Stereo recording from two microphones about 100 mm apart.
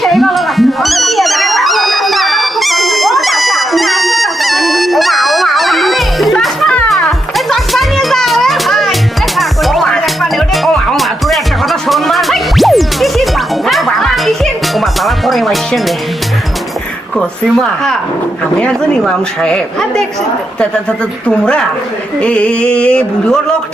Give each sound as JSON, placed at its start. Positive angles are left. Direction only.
{"t": 0.0, "sound": "music", "side_deg": 0}
{"t": 17.2, "sound": "a woman's voice", "side_deg": 5}
{"t": 21.2, "sound": "a woman's voice", "side_deg": 10}